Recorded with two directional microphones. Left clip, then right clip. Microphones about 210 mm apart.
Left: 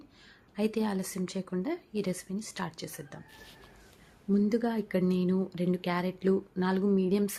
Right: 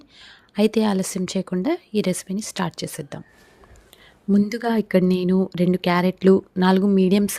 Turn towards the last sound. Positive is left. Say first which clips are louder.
# right 9 dB
turn(degrees=-40)  # may be behind; listen again after turning